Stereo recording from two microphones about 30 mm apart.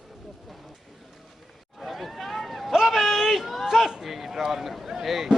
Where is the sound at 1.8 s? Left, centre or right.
Centre.